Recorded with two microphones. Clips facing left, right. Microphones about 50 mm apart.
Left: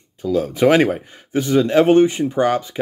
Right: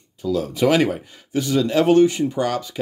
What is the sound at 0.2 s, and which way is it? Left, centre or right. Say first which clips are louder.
Speech: left 3 dB; left.